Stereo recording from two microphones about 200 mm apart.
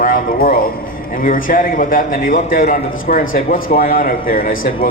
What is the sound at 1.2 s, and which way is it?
A man's voice, 45° left (ahead or behind).